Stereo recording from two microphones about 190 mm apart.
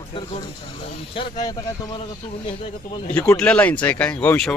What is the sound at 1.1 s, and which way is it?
Speech, 30° left (ahead or behind).